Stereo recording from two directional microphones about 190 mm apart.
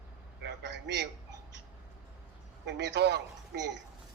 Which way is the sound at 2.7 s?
60° right (ahead or behind).